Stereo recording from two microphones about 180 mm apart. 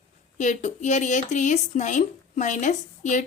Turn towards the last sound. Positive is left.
turn(degrees=45)  # may be behind; listen again after turning